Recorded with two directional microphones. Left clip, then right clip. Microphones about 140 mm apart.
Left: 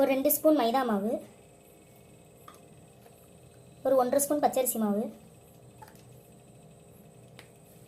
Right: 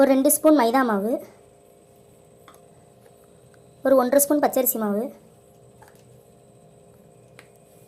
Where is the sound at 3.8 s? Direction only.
40° right (ahead or behind).